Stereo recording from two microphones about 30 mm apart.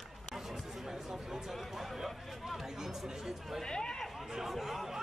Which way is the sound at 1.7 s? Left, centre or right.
Centre.